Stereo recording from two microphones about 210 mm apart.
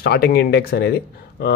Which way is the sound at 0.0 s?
50° left (ahead or behind).